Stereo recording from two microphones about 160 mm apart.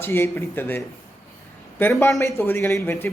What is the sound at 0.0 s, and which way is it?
A man's voice, 15° left (ahead or behind).